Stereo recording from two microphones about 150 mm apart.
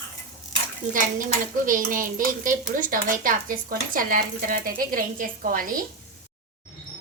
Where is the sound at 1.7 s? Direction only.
65° right (ahead or behind).